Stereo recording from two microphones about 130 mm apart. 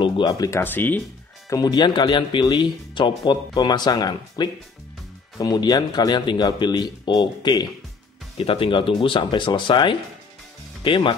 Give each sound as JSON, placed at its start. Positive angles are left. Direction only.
{"t": 0.0, "sound": "speech", "side_deg": 30}
{"t": 1.5, "sound": "speech", "side_deg": 35}